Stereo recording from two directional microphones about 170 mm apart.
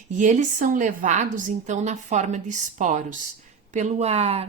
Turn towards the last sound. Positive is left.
turn(degrees=-35)  # may be behind; listen again after turning